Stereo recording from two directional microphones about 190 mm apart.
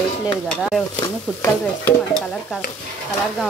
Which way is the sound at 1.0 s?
10° left (ahead or behind).